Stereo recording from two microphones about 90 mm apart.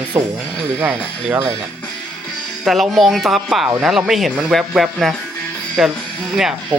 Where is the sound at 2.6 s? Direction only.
Centre (ahead or behind).